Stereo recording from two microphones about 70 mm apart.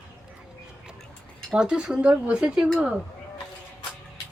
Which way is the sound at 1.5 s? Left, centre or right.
Centre.